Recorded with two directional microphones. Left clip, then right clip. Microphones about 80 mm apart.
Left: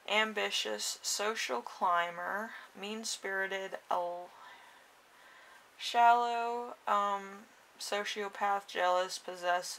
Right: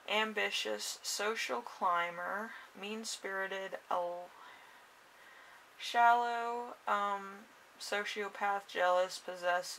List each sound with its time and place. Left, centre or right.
0.0 s speech: left
5.8 s speech: left